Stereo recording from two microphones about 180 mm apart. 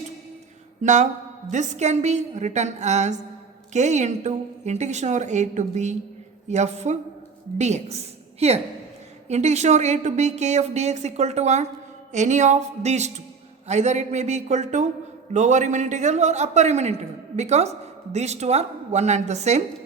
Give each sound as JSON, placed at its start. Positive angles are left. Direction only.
{"t": 0.8, "sound": "a man's voice", "side_deg": -40}